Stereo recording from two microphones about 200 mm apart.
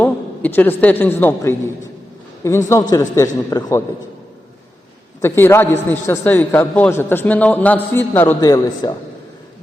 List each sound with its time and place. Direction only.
0.0 s a man's voice: 10° left (ahead or behind)
5.2 s a man's voice: 15° left (ahead or behind)